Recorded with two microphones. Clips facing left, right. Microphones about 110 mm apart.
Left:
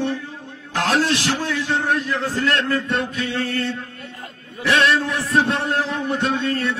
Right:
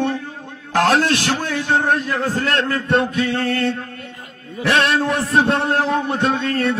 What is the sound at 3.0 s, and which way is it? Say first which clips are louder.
Mantra: right 5 dB; 55° right (ahead or behind).